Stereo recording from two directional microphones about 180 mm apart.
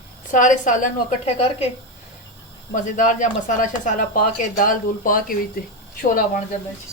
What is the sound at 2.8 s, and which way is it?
Speech, 45° left (ahead or behind).